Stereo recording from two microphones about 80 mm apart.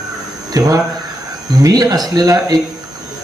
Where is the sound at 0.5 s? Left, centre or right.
Right.